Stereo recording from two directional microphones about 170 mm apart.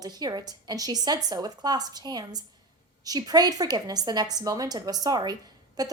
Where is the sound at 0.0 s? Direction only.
25° right (ahead or behind).